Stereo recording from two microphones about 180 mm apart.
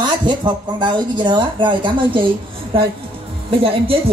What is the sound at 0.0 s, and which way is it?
Speech, 25° right (ahead or behind).